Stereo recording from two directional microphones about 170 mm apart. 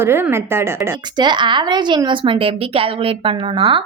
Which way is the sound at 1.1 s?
25° right (ahead or behind).